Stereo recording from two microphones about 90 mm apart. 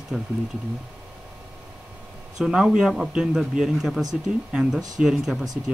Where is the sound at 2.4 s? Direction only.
5° right (ahead or behind).